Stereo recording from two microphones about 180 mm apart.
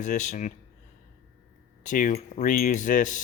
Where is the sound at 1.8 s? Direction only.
50° left (ahead or behind).